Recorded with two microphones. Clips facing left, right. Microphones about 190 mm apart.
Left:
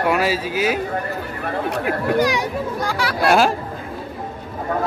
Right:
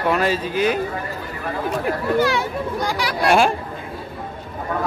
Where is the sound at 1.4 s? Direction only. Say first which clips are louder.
Even; 60° left (ahead or behind).